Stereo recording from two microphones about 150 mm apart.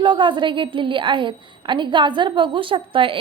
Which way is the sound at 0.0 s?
30° right (ahead or behind).